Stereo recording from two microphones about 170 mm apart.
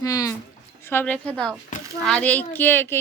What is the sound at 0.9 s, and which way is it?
A woman's voice, 10° left (ahead or behind).